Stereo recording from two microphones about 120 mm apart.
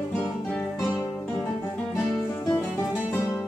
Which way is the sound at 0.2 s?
10° left (ahead or behind).